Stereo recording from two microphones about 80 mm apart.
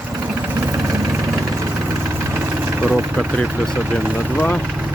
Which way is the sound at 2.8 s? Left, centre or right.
Centre.